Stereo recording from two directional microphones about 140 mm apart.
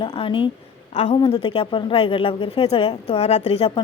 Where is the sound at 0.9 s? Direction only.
50° left (ahead or behind).